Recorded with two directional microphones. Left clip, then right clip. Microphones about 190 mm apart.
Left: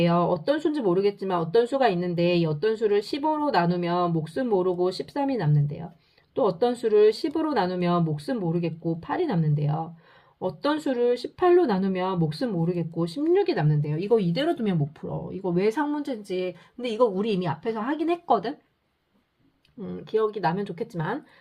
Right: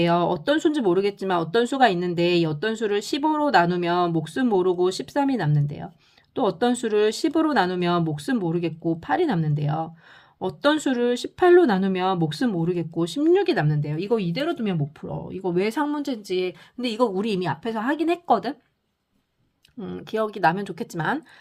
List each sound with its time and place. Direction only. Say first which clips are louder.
0.0 s speech: right 2 dB; 50° right (ahead or behind); by 14.8 s 15° right (ahead or behind)
15.0 s speech: right 3 dB; 30° right (ahead or behind)
19.8 s speech: left 1 dB; 55° right (ahead or behind)